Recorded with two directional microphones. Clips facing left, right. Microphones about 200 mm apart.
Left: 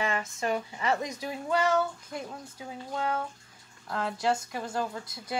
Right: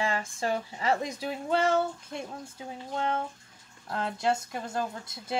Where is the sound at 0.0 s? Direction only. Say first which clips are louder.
Even; 30° right (ahead or behind).